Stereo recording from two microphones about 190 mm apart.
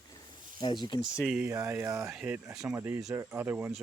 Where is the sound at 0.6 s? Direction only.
25° left (ahead or behind).